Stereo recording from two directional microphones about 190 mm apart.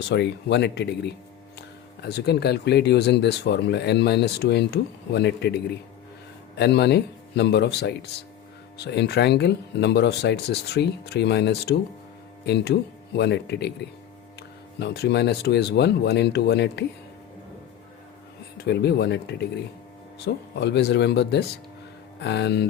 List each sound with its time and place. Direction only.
0.1 s speech: 65° left (ahead or behind)
6.6 s speech: 60° left (ahead or behind)
14.8 s speech: 60° left (ahead or behind)
18.5 s speech: 60° left (ahead or behind)